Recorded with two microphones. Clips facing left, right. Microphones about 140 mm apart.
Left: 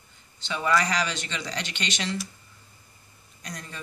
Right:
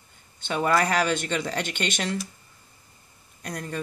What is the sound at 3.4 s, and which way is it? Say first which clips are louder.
Speech: right 7 dB; 55° right (ahead or behind).